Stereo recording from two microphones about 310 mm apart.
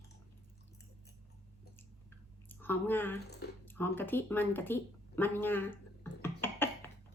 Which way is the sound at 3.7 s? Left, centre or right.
Centre.